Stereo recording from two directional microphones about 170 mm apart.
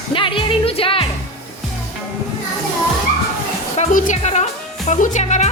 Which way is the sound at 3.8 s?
45° left (ahead or behind).